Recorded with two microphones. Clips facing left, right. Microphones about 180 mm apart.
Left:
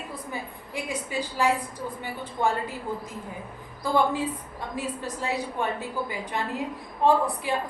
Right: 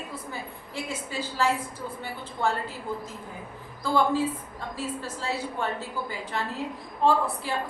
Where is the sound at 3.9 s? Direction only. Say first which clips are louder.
Right 1 dB; 15° left (ahead or behind).